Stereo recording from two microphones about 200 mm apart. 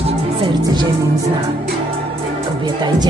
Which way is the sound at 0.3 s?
25° right (ahead or behind).